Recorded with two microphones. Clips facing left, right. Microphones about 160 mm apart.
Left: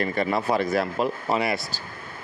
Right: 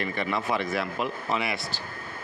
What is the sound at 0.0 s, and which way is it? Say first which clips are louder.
Speech: left 5 dB; 40° left (ahead or behind).